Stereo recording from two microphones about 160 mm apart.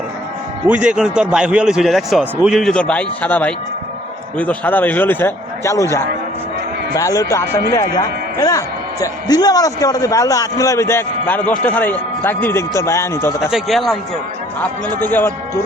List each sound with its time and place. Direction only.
0.7 s a man's voice: 5° right (ahead or behind); by 5.8 s 15° left (ahead or behind)
6.9 s a man's voice: 20° left (ahead or behind)
13.5 s a man's voice: centre (ahead or behind)
14.6 s a man's voice: 10° left (ahead or behind)